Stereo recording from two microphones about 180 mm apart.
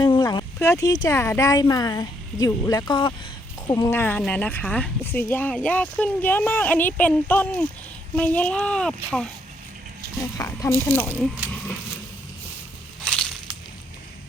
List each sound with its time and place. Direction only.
0.0 s a sound: 20° left (ahead or behind)
1.0 s speech: 15° left (ahead or behind)
10.3 s speech: 15° left (ahead or behind)